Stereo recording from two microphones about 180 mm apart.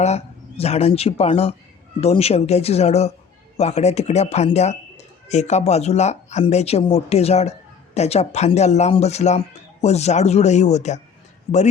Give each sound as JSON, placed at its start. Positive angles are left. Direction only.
{"t": 0.0, "sound": "a man's voice", "side_deg": 35}